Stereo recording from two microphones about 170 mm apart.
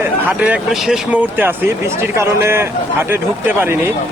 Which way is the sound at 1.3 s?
15° right (ahead or behind).